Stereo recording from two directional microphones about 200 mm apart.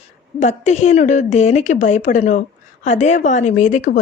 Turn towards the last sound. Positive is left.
turn(degrees=40)  # may be behind; listen again after turning